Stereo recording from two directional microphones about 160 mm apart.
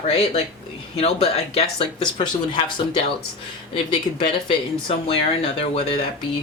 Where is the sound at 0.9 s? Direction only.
40° left (ahead or behind).